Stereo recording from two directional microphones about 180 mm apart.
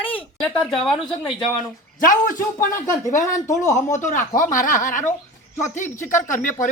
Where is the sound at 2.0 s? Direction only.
50° left (ahead or behind).